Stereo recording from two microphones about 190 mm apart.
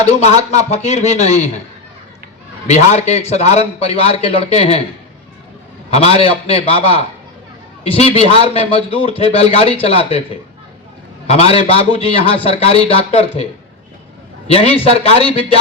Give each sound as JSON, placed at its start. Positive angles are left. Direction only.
{"t": 0.0, "sound": "a man's voice", "side_deg": 35}
{"t": 2.6, "sound": "a man's voice", "side_deg": 35}
{"t": 5.9, "sound": "a man's voice", "side_deg": 30}